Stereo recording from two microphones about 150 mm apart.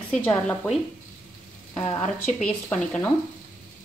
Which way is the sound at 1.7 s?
10° left (ahead or behind).